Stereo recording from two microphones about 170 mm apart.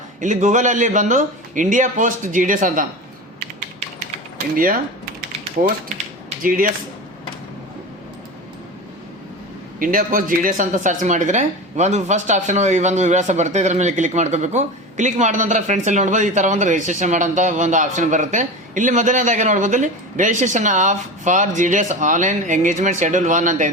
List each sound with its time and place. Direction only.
0.2 s speech: 45° right (ahead or behind)
4.5 s speech: 55° right (ahead or behind)
9.7 s speech: 50° right (ahead or behind)